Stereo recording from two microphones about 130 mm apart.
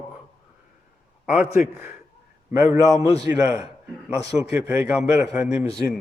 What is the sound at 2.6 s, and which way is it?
A man's voice, 25° right (ahead or behind).